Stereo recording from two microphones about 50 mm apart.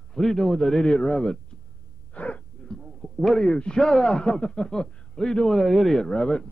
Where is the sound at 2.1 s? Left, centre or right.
Left.